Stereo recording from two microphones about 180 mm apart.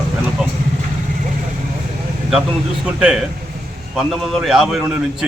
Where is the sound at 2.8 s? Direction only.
5° right (ahead or behind).